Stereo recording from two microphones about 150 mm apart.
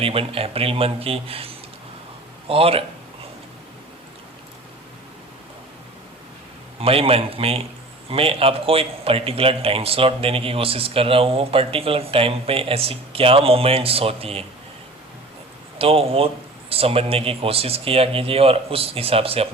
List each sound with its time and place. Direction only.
0.0 s a man's voice: 40° right (ahead or behind)
6.7 s a man's voice: 40° right (ahead or behind)
15.8 s a man's voice: 40° right (ahead or behind)